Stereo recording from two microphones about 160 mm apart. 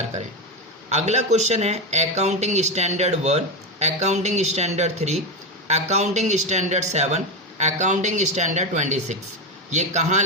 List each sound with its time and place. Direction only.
0.9 s speech: 45° right (ahead or behind)